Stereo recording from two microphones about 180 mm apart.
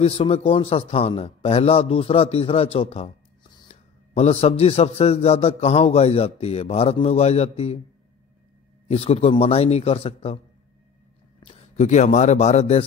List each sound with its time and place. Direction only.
0.0 s a man's voice: 35° left (ahead or behind)
8.8 s a man's voice: 35° left (ahead or behind)
11.4 s speech: 35° left (ahead or behind)